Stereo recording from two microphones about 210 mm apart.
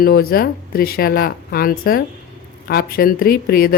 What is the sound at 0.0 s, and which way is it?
Speech, 45° left (ahead or behind).